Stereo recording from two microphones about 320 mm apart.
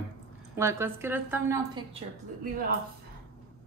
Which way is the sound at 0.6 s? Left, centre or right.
Centre.